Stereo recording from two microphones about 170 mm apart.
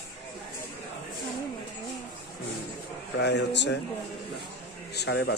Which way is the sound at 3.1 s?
90° left.